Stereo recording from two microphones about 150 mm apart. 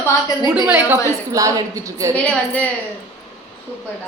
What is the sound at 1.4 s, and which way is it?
Speech, 25° right (ahead or behind).